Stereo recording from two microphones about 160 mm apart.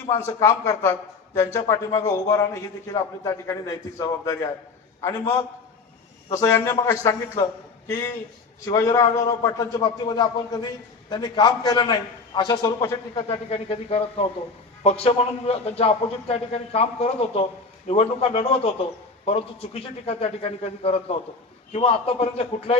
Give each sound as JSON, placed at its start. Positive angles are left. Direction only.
{"t": 0.3, "sound": "a man's voice", "side_deg": 20}
{"t": 8.6, "sound": "a man's voice", "side_deg": 20}
{"t": 13.2, "sound": "a man's voice", "side_deg": 35}